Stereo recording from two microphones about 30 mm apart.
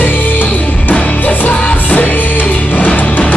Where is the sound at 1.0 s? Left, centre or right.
Left.